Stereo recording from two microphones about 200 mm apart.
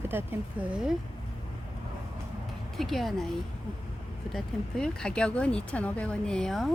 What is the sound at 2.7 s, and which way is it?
Speech, centre (ahead or behind).